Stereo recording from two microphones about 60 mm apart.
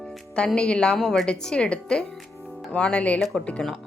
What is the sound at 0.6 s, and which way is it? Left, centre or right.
A woman's voice, centre.